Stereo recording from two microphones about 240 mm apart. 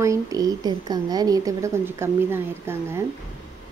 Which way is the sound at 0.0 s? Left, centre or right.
Centre.